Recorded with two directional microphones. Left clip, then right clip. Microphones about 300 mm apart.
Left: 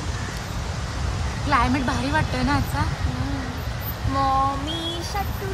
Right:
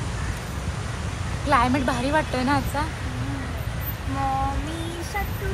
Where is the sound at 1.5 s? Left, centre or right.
Centre.